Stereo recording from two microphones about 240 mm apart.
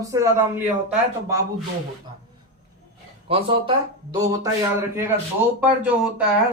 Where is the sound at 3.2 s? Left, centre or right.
Right; by 6.2 s centre.